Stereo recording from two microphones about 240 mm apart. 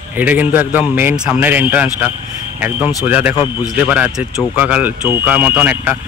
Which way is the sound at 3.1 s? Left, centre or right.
Centre.